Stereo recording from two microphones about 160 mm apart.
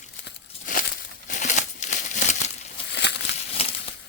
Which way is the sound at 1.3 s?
50° left (ahead or behind).